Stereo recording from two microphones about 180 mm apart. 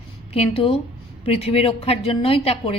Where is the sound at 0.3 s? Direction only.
30° left (ahead or behind).